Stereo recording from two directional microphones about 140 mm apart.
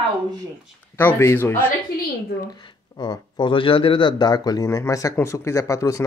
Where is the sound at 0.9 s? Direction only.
15° left (ahead or behind).